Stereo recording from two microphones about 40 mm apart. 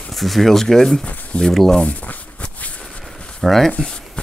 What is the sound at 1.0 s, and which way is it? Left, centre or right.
Speech, left.